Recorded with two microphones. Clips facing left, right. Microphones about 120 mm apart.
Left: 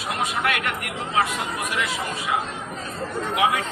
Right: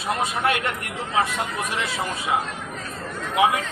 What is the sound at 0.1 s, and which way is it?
Speech, 30° right (ahead or behind).